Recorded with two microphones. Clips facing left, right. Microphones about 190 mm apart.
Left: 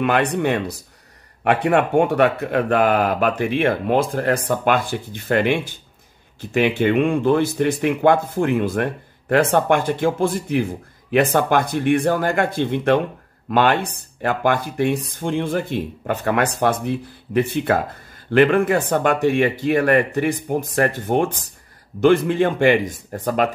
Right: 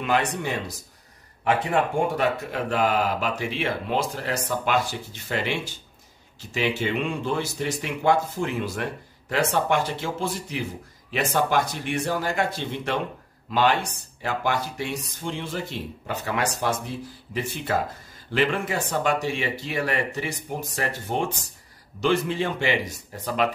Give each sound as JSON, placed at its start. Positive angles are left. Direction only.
{"t": 0.0, "sound": "a man's voice", "side_deg": 60}